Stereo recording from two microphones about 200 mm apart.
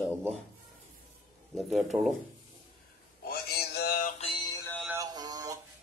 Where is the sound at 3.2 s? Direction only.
50° left (ahead or behind).